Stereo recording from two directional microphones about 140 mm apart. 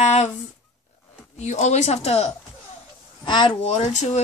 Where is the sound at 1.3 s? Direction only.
55° left (ahead or behind).